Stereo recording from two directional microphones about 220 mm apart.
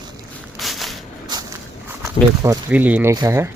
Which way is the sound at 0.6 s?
Centre (ahead or behind).